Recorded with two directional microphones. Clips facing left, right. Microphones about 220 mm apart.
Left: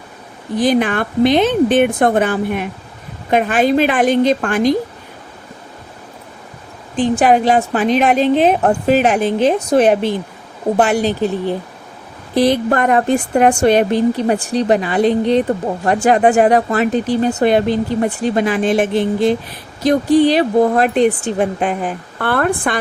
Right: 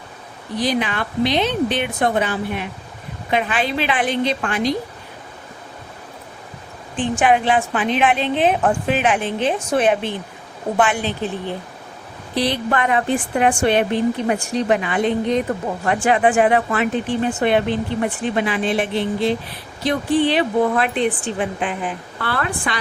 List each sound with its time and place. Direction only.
0.5 s speech: 50° left (ahead or behind)
6.9 s speech: 35° left (ahead or behind)
12.3 s speech: 45° left (ahead or behind)